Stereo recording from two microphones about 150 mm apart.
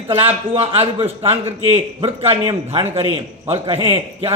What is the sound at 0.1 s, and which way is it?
A man's voice, 40° right (ahead or behind).